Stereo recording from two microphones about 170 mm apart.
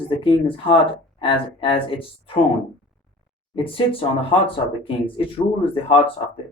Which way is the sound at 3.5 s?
30° left (ahead or behind).